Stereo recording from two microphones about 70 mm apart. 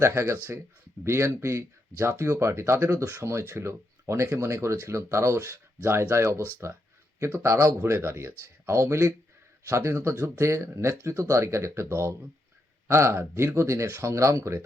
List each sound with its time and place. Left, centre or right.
0.0 s speech: right